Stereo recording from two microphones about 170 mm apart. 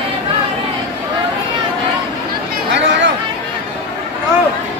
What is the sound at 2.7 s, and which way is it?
Chatter, 90° right.